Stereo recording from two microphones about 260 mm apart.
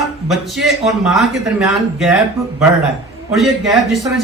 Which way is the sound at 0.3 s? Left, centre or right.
Centre.